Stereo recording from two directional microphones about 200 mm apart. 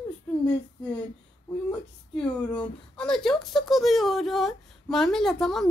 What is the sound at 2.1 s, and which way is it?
Speech, 5° left (ahead or behind).